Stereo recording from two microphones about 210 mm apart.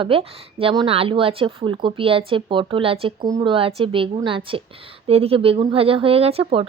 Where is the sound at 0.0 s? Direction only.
25° right (ahead or behind).